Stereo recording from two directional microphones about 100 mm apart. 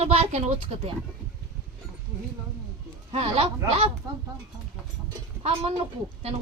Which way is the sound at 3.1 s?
70° right (ahead or behind).